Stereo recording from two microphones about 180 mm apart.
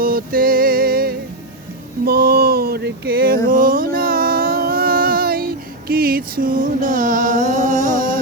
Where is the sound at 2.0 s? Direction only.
60° right (ahead or behind).